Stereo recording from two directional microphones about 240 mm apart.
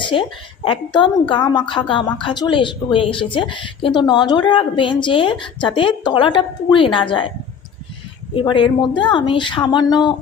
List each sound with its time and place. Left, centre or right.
0.0 s speech: left
8.3 s speech: left